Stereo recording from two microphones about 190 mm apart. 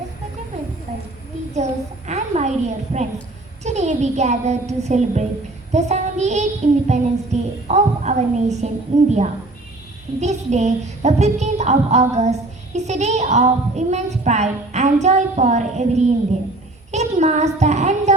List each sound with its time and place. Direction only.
2.0 s a sound: 35° right (ahead or behind)
3.6 s child singing: 35° right (ahead or behind)
16.9 s a child's voice: 35° right (ahead or behind)